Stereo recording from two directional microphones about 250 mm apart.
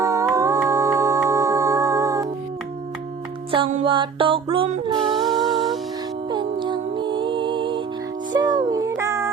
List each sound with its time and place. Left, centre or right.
0.0 s music: centre
3.5 s mantra: right
5.1 s music: centre
6.3 s music: centre